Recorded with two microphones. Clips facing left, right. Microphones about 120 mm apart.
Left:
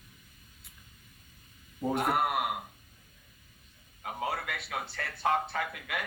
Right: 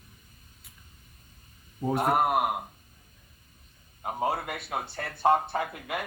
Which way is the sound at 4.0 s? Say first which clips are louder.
Right 6 dB; 35° right (ahead or behind).